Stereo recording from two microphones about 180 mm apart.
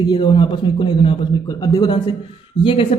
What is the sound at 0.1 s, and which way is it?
A man's voice, 25° left (ahead or behind).